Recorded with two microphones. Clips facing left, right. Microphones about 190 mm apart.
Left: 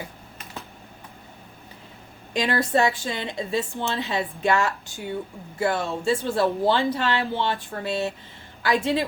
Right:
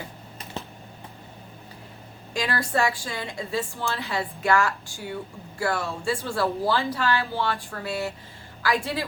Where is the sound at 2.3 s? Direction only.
20° left (ahead or behind).